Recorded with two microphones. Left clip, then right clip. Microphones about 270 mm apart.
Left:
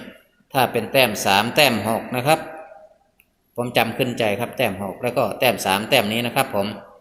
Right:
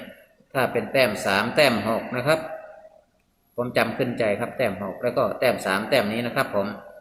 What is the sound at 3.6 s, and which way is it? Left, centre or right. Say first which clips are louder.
Speech: left 3 dB; centre.